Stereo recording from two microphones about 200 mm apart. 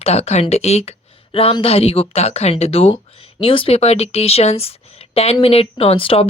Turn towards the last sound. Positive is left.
turn(degrees=25)  # may be behind; listen again after turning